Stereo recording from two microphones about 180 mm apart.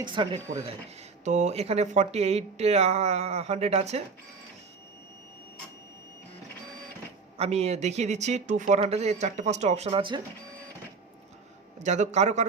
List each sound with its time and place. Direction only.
0.0 s speech: 25° right (ahead or behind)
1.2 s speech: 40° right (ahead or behind)
7.3 s speech: 35° right (ahead or behind)
11.8 s speech: 40° right (ahead or behind)